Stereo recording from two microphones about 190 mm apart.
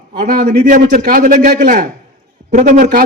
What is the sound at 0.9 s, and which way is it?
A man's voice, 45° right (ahead or behind).